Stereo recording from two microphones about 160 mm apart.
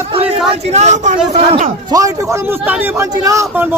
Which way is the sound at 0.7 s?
45° right (ahead or behind).